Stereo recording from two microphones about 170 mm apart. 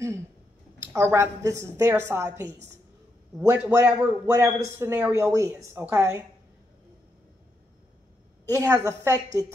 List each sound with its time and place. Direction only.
0.7 s a woman's voice: 15° right (ahead or behind)
8.5 s a woman's voice: 20° right (ahead or behind)